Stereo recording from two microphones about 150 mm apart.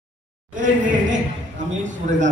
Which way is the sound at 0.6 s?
55° right (ahead or behind).